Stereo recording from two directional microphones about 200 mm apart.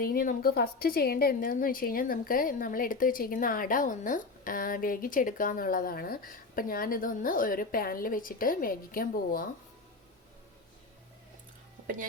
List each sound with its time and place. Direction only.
0.0 s a woman's voice: 45° left (ahead or behind)